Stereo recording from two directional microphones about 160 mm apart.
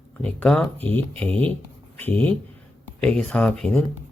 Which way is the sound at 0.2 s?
5° left (ahead or behind).